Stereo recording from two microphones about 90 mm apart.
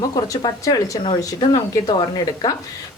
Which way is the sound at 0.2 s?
40° left (ahead or behind).